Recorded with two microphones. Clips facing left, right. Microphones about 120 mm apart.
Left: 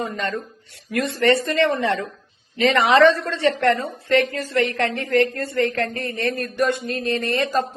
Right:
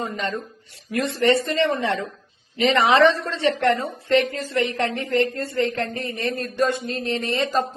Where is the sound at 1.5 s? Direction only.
65° left (ahead or behind).